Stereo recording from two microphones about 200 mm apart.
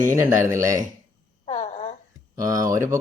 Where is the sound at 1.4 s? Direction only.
35° left (ahead or behind).